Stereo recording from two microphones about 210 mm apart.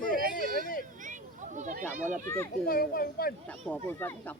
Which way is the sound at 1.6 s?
35° right (ahead or behind).